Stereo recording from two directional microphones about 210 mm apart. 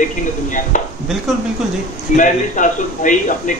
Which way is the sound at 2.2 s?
40° left (ahead or behind).